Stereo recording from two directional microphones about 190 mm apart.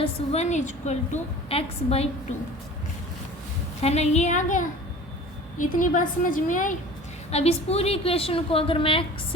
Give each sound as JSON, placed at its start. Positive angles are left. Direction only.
{"t": 0.0, "sound": "a woman's voice", "side_deg": 35}
{"t": 3.8, "sound": "a woman's voice", "side_deg": 35}
{"t": 7.3, "sound": "a woman's voice", "side_deg": 35}